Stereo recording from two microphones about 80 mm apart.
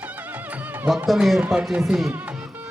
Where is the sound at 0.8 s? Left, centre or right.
Centre.